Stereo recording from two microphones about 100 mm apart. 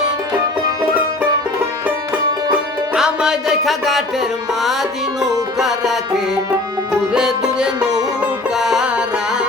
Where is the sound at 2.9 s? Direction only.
10° right (ahead or behind).